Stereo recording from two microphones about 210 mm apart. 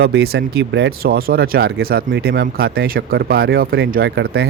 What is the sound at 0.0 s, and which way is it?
Speech, 50° right (ahead or behind).